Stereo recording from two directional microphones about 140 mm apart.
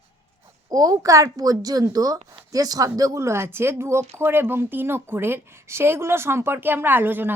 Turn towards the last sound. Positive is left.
turn(degrees=-15)  # may be behind; listen again after turning